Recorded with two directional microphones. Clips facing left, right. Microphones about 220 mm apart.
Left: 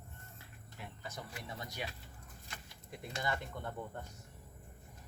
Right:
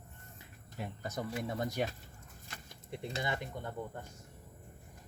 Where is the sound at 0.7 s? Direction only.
45° right (ahead or behind).